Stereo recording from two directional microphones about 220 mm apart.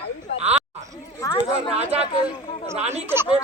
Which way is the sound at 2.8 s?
30° right (ahead or behind).